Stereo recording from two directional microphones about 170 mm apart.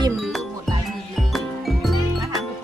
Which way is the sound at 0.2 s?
Centre (ahead or behind).